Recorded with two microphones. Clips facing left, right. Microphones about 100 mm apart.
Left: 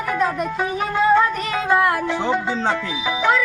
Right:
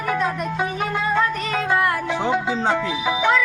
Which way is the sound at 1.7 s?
20° left (ahead or behind).